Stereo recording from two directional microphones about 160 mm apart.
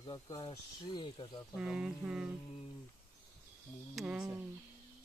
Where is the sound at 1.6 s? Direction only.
5° right (ahead or behind).